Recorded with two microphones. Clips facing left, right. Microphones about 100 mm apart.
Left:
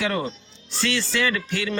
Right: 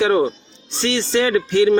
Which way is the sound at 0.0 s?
30° right (ahead or behind).